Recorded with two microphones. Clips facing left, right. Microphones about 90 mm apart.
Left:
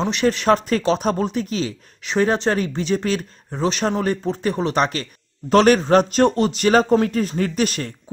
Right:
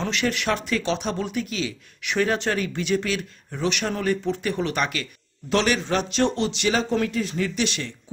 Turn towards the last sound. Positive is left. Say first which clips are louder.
# left 4 dB
turn(degrees=45)  # may be behind; listen again after turning